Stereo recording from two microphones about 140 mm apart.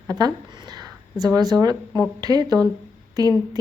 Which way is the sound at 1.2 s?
25° right (ahead or behind).